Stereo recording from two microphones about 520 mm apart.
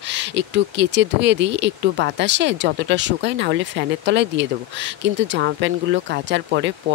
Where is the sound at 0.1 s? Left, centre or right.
Centre.